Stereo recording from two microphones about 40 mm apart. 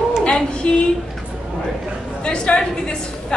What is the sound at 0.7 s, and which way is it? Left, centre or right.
Speech, left.